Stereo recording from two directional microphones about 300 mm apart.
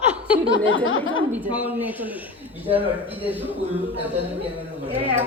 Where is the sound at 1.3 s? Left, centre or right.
Centre.